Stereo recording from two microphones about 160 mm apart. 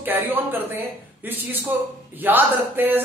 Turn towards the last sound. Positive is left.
turn(degrees=-10)  # may be behind; listen again after turning